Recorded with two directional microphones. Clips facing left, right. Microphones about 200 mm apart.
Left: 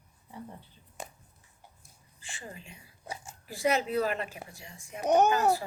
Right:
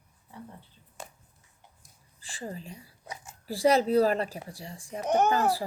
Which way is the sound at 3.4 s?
35° right (ahead or behind).